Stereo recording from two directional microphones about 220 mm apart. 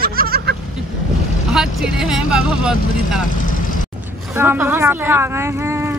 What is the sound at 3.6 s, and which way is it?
Vehicle, 40° left (ahead or behind).